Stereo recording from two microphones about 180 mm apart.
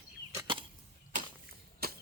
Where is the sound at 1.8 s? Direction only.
55° right (ahead or behind).